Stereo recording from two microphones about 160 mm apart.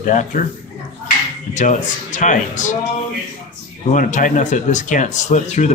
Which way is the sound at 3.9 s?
55° left (ahead or behind).